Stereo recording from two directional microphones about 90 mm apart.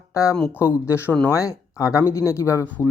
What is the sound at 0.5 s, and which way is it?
Speech, 25° left (ahead or behind).